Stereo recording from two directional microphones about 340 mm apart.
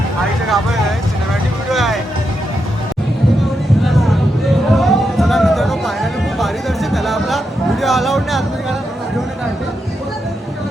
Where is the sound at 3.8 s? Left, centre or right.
Centre.